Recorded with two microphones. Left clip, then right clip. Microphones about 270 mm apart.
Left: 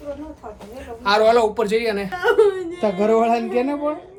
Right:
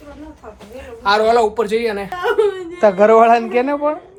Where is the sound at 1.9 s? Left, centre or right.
Centre.